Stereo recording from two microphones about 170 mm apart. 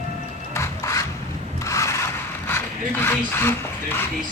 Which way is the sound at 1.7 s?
15° left (ahead or behind).